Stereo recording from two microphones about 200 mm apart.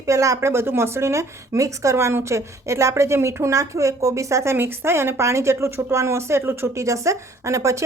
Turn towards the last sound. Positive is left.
turn(degrees=-15)  # may be behind; listen again after turning